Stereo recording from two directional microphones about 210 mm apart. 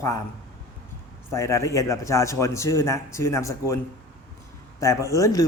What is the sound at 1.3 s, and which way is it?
A man's voice, 15° left (ahead or behind).